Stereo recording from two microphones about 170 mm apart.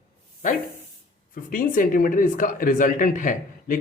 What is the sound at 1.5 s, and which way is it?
Speech, 55° left (ahead or behind).